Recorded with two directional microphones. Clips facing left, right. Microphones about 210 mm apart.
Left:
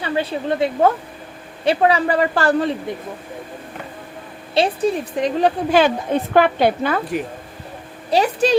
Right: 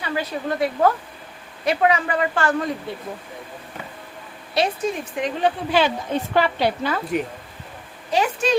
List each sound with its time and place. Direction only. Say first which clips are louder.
0.0 s a woman's voice: left 4 dB; 30° left (ahead or behind)
4.5 s a woman's voice: left 4 dB; 30° left (ahead or behind); by 7.0 s 55° left (ahead or behind)
8.1 s a woman's voice: left 4 dB; 35° left (ahead or behind)